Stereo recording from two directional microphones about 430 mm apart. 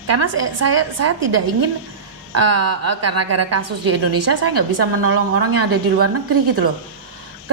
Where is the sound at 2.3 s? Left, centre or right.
Right.